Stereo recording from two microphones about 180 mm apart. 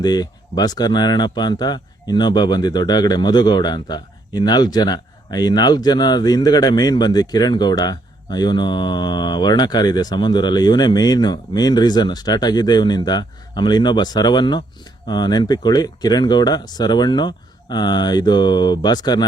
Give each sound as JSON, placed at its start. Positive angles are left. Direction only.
{"t": 0.0, "sound": "speech", "side_deg": 20}